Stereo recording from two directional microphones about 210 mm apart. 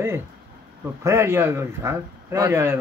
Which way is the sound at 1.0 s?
15° right (ahead or behind).